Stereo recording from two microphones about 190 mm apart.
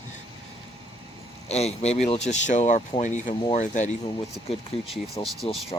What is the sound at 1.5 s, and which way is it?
Speech, 35° left (ahead or behind).